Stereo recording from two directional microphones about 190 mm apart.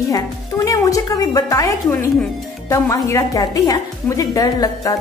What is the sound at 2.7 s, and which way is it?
A woman's voice, 15° left (ahead or behind).